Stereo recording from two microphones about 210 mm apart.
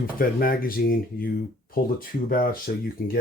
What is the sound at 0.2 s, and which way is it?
Speech, 45° left (ahead or behind).